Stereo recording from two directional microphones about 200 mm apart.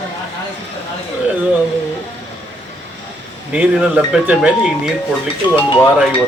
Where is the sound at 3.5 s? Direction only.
5° right (ahead or behind).